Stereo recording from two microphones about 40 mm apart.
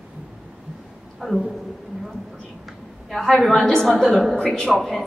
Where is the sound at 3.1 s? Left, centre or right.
Centre.